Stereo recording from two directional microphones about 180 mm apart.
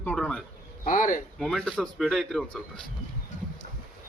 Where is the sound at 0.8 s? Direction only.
50° left (ahead or behind).